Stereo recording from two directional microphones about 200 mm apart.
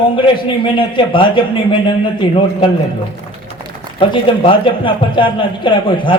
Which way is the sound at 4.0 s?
25° left (ahead or behind).